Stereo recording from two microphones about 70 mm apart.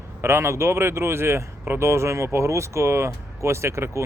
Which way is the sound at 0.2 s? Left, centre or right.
Right.